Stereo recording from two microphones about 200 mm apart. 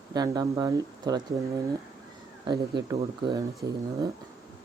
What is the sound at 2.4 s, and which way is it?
Speech, 20° right (ahead or behind).